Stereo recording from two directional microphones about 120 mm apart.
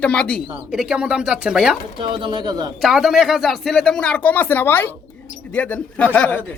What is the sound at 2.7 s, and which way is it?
Speech, centre (ahead or behind).